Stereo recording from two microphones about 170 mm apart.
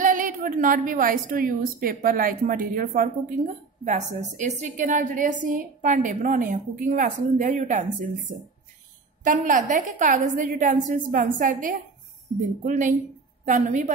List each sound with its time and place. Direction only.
0.0 s a woman's voice: 50° right (ahead or behind)
9.2 s a woman's voice: 50° right (ahead or behind)